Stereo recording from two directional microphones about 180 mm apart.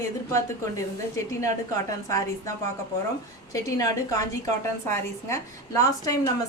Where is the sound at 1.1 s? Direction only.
15° left (ahead or behind).